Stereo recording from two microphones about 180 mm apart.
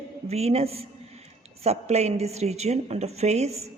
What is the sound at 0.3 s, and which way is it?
A woman's voice, 35° right (ahead or behind).